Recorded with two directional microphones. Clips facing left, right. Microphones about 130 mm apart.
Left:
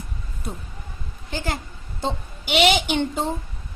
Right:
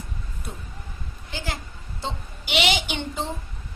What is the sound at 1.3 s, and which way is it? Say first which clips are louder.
A woman's voice: left 5 dB; 45° left (ahead or behind).